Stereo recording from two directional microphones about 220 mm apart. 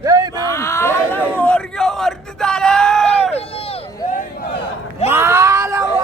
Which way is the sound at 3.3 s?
25° left (ahead or behind).